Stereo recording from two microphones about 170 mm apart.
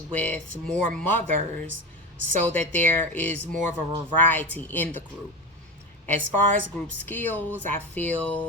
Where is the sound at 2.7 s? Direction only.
10° left (ahead or behind).